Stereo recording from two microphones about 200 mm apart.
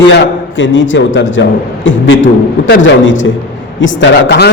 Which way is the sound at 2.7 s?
70° left (ahead or behind).